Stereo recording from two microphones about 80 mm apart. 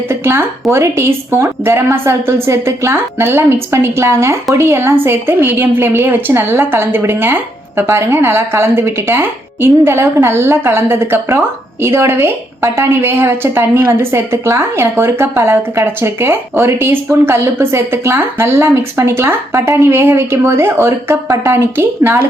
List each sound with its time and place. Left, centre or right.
0.1 s a woman's voice: right